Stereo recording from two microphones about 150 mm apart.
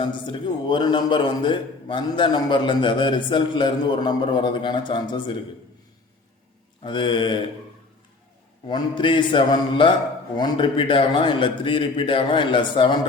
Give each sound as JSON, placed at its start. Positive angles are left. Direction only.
{"t": 0.0, "sound": "a man's voice", "side_deg": 30}
{"t": 6.8, "sound": "a man's voice", "side_deg": 35}
{"t": 8.6, "sound": "a man's voice", "side_deg": 35}